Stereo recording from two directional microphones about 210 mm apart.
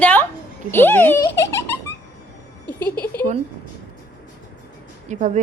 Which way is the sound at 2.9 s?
50° left (ahead or behind).